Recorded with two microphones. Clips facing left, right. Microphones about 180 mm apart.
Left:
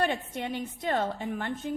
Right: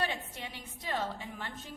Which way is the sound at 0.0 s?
55° left (ahead or behind).